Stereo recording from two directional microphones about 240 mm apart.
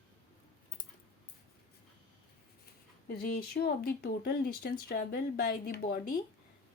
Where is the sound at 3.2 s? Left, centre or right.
Left.